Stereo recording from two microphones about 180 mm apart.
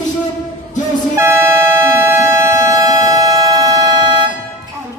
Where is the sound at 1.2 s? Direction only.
15° right (ahead or behind).